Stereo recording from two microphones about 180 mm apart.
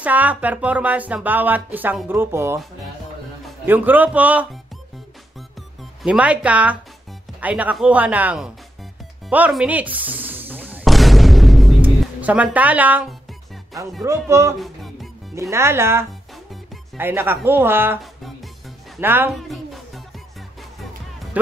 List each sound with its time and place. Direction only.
0.0 s speech: 10° right (ahead or behind)
3.6 s speech: 10° right (ahead or behind)
6.0 s speech: 5° right (ahead or behind)
9.3 s music: 5° right (ahead or behind)
11.8 s speech: 10° right (ahead or behind)
14.6 s music: centre (ahead or behind)
15.5 s speech: 15° right (ahead or behind)
18.9 s speech: 10° right (ahead or behind)
19.3 s a sound: centre (ahead or behind)